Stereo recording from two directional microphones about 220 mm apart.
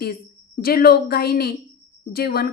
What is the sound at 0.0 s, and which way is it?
A woman's voice, 45° left (ahead or behind).